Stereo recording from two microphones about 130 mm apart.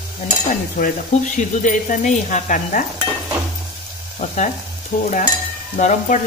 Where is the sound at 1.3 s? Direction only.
75° left (ahead or behind).